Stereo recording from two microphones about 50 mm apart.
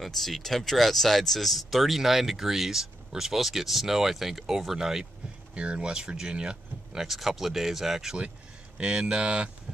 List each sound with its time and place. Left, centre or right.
0.0 s speech: centre
5.5 s speech: right
8.7 s speech: centre